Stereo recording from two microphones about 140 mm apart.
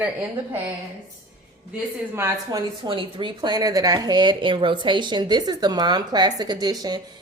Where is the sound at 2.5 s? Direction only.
35° right (ahead or behind).